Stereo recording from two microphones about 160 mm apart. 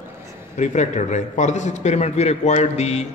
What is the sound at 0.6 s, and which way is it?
A man's voice, 45° left (ahead or behind).